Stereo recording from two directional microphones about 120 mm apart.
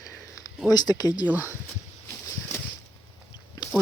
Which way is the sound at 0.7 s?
35° left (ahead or behind).